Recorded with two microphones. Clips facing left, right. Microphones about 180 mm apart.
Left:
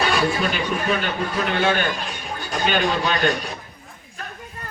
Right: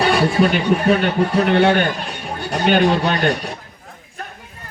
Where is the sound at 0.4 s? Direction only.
65° right (ahead or behind).